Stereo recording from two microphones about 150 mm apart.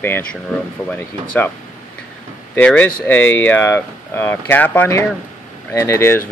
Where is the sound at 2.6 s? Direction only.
10° left (ahead or behind).